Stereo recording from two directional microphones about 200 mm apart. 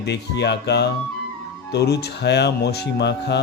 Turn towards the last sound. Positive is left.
turn(degrees=55)  # may be behind; listen again after turning